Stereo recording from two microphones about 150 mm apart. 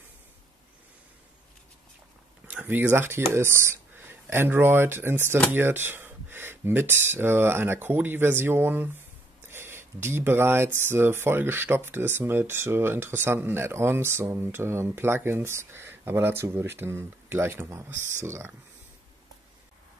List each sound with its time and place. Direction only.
2.4 s speech: 10° right (ahead or behind)